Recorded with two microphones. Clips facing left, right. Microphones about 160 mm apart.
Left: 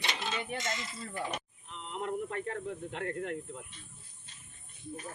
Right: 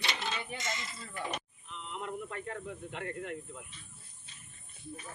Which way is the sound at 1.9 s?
45° left (ahead or behind).